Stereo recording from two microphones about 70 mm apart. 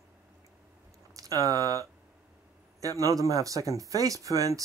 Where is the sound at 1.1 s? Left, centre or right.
Right.